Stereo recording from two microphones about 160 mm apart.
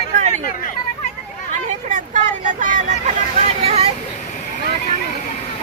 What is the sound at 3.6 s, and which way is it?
Vehicle, 40° right (ahead or behind).